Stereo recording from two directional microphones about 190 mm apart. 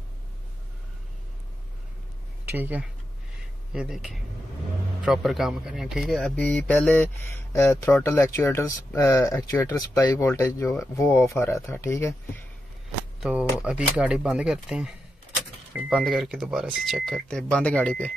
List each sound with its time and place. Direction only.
2.5 s speech: 10° right (ahead or behind); by 12.4 s 15° left (ahead or behind)
13.2 s speech: 5° right (ahead or behind)